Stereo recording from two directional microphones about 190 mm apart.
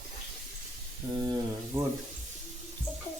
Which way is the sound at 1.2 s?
15° right (ahead or behind).